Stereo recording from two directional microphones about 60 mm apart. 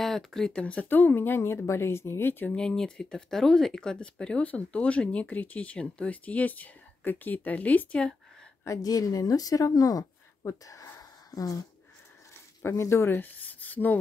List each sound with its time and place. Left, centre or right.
0.0 s speech: centre; by 2.5 s left
2.5 s speech: centre
8.6 s speech: left
10.4 s speech: left
11.0 s a sound: left
12.6 s speech: left
13.2 s a sound: left